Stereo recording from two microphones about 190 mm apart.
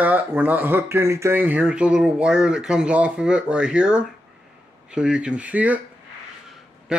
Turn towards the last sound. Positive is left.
turn(degrees=-5)  # may be behind; listen again after turning